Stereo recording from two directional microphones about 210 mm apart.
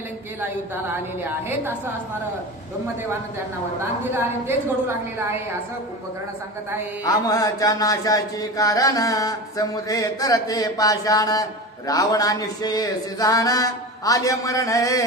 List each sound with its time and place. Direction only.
1.2 s a woman's voice: 10° right (ahead or behind)
4.1 s a woman's voice: 10° right (ahead or behind)
7.0 s mantra: 15° left (ahead or behind)